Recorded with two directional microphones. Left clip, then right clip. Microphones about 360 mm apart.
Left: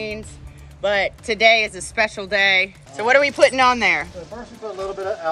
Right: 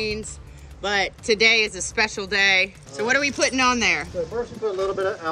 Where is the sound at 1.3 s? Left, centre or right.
Left.